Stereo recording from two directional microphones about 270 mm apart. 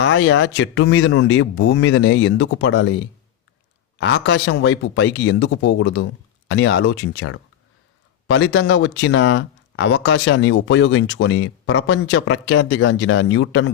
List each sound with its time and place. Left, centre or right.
0.0 s speech: left
3.9 s speech: left